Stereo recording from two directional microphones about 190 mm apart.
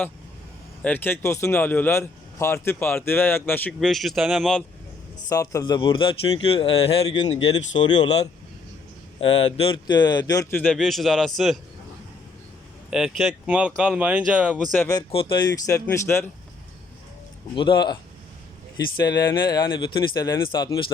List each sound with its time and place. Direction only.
0.8 s speech: 10° left (ahead or behind)
5.3 s a man's voice: 15° left (ahead or behind); by 11.6 s centre (ahead or behind)
12.9 s speech: centre (ahead or behind)
14.8 s a man's voice: 20° left (ahead or behind)
17.5 s a man's voice: 25° left (ahead or behind)
19.0 s a man's voice: 20° left (ahead or behind)